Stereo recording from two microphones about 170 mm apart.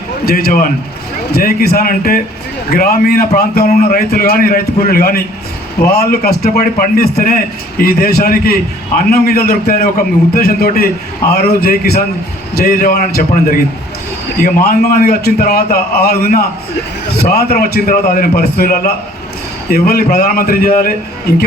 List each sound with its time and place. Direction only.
0.3 s a man's voice: 65° left (ahead or behind)